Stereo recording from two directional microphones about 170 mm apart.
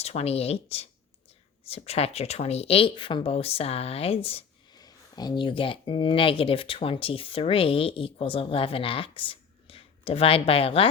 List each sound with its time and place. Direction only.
0.0 s speech: 40° left (ahead or behind)
4.8 s speech: 25° left (ahead or behind)